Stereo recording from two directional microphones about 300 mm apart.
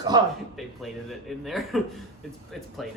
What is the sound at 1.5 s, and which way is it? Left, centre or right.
Speech, centre.